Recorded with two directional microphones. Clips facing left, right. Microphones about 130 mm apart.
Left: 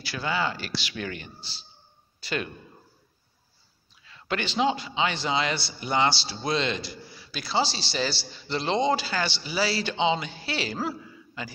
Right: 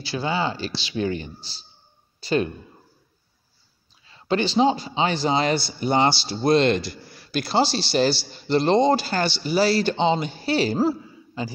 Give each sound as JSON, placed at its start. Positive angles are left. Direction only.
{"t": 0.0, "sound": "speech", "side_deg": -25}
{"t": 4.0, "sound": "speech", "side_deg": -30}